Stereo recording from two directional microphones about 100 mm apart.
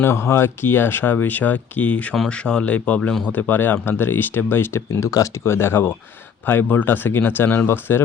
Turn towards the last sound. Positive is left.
turn(degrees=20)  # may be behind; listen again after turning